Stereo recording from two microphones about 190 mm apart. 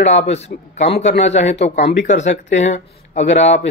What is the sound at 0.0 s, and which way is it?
Speech, 35° left (ahead or behind).